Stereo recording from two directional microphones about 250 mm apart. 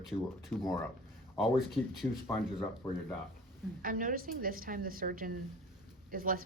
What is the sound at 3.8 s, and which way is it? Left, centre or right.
A woman's voice, right.